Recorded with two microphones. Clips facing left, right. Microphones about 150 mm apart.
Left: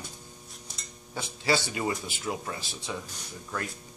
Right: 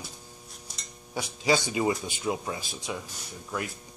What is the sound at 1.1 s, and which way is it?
Speech, 15° right (ahead or behind).